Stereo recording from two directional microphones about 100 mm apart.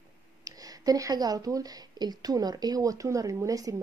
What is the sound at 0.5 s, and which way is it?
A woman's voice, 35° right (ahead or behind).